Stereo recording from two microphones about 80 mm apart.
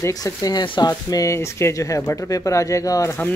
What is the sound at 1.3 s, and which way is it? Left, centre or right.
Speech, left.